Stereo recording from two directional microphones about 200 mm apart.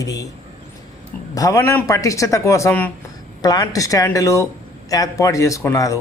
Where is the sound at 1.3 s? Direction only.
15° left (ahead or behind).